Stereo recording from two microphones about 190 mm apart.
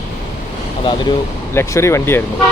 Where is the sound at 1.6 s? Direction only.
15° left (ahead or behind).